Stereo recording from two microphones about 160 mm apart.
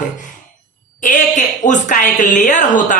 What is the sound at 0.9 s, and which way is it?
A woman's voice, 50° left (ahead or behind).